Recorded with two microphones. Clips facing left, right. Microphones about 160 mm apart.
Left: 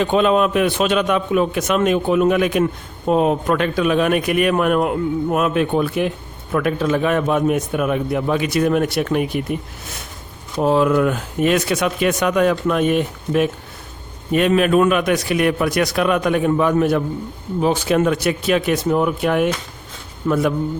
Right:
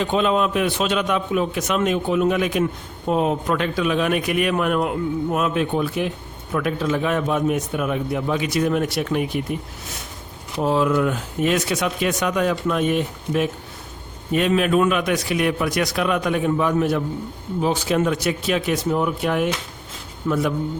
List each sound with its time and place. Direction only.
0.0 s speech: 60° left (ahead or behind)
10.6 s speech: 60° left (ahead or behind)